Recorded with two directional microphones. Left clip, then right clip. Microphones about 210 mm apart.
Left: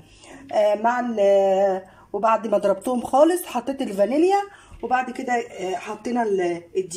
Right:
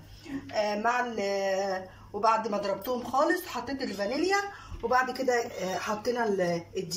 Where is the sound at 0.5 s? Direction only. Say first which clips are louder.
Left 9 dB; 55° left (ahead or behind).